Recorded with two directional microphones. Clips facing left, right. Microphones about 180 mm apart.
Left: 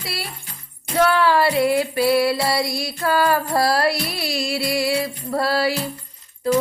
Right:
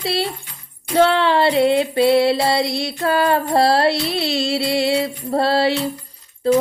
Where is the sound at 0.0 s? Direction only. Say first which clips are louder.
Right 10 dB; 25° right (ahead or behind).